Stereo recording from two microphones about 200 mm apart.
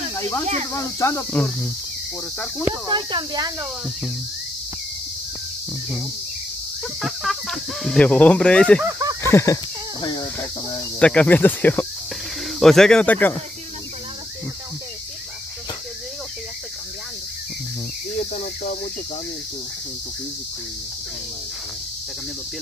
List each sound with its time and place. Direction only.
0.1 s cricket: 15° left (ahead or behind)
0.7 s speech: 15° left (ahead or behind)
2.6 s speech: 20° right (ahead or behind)
7.0 s speech: centre (ahead or behind)
11.0 s speech: 5° left (ahead or behind)
18.3 s speech: 40° left (ahead or behind)